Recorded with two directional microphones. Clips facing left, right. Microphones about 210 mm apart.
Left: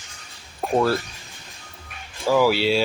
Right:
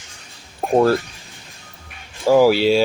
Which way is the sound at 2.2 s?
45° right (ahead or behind).